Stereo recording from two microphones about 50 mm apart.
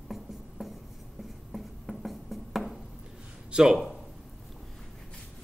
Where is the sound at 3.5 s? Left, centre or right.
Centre.